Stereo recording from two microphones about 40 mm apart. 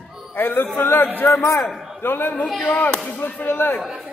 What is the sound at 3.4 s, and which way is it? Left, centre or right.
Speech, left.